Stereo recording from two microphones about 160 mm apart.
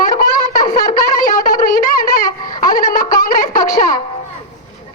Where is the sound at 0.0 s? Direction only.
60° left (ahead or behind).